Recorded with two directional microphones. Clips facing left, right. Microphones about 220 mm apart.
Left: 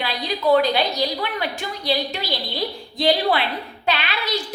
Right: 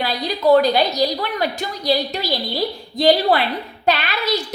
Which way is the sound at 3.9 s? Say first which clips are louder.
Right 4 dB; 40° right (ahead or behind).